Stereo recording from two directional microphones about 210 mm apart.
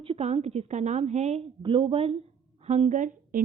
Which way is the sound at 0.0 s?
30° right (ahead or behind).